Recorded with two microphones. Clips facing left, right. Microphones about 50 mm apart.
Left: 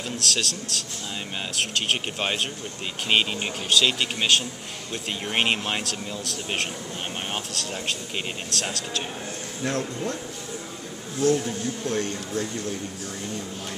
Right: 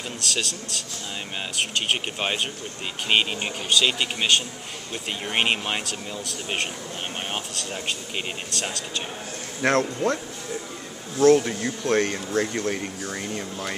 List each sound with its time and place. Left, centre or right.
0.2 s a man's voice: centre
9.6 s speech: right
11.1 s speech: right